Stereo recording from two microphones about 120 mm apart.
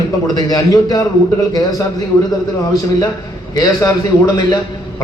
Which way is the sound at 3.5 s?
30° left (ahead or behind).